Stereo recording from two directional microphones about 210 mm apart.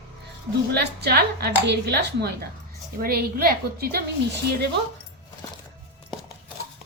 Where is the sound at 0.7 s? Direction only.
50° right (ahead or behind).